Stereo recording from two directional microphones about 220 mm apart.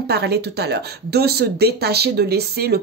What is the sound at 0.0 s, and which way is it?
Speech, 45° right (ahead or behind).